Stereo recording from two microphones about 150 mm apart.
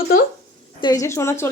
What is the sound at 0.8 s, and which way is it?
Speech, 25° left (ahead or behind).